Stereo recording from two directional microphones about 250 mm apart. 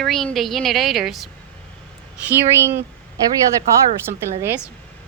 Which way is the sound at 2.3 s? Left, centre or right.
Centre.